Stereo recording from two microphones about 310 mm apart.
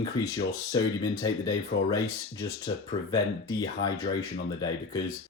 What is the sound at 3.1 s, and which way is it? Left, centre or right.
Speech, centre.